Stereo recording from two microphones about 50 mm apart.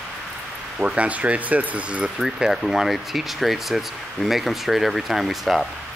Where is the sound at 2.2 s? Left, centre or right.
Centre.